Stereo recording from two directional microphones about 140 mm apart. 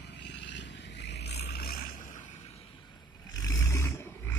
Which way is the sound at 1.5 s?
90° left.